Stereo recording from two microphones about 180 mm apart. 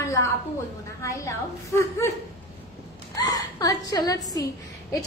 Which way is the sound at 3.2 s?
20° left (ahead or behind).